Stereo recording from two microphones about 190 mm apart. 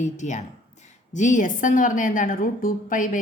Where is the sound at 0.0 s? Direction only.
40° left (ahead or behind).